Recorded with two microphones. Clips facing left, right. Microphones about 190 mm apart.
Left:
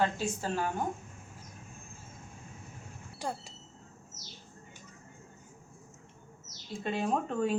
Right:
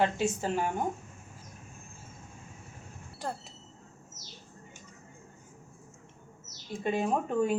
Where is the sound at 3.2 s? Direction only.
Centre (ahead or behind).